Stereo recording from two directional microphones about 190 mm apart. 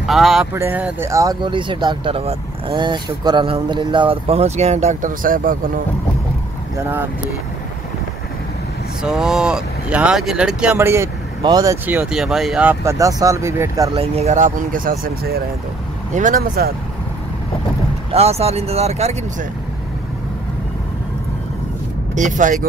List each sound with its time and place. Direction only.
0.0 s speech: centre (ahead or behind); by 5.7 s 45° right (ahead or behind)
6.8 s speech: 10° right (ahead or behind)
9.0 s speech: 5° right (ahead or behind)
13.9 s speech: 35° right (ahead or behind)
18.1 s speech: 35° right (ahead or behind)
22.1 s speech: 40° right (ahead or behind)